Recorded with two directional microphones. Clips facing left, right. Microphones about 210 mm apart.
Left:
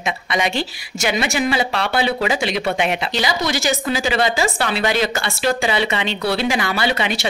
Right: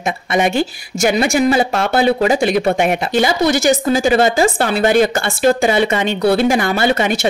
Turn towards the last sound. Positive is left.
turn(degrees=-45)  # may be behind; listen again after turning